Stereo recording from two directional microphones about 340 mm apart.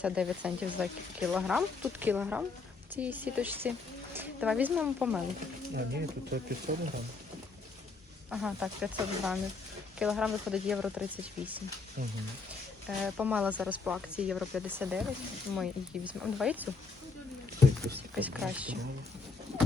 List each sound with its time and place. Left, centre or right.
0.0 s speech: centre
5.7 s speech: right
8.3 s speech: centre
13.1 s speech: centre
18.1 s speech: centre